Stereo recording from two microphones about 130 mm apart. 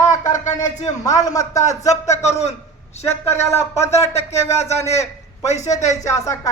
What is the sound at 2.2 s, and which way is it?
Speech, 55° left (ahead or behind).